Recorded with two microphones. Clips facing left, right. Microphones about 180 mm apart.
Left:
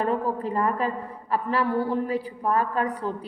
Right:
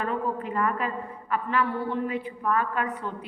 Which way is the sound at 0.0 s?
35° left (ahead or behind).